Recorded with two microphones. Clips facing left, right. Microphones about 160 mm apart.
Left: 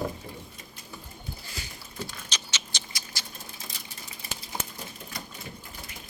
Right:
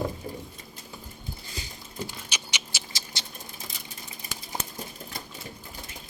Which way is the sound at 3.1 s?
20° right (ahead or behind).